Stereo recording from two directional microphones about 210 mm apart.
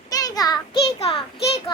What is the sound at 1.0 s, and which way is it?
Speech, 25° left (ahead or behind).